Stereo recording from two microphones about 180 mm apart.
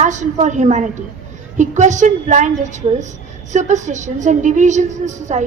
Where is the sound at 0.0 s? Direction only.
40° right (ahead or behind).